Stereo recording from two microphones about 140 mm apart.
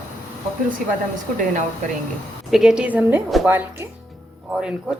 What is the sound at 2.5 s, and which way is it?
A woman's voice, 5° right (ahead or behind).